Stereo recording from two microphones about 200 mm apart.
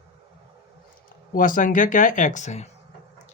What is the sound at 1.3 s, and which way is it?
Speech, 40° left (ahead or behind).